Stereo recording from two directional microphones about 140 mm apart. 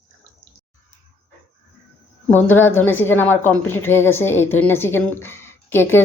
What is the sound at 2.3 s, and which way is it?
A woman's voice, 15° left (ahead or behind).